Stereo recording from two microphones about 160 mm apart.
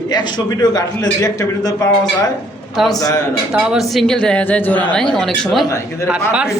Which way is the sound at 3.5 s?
5° right (ahead or behind).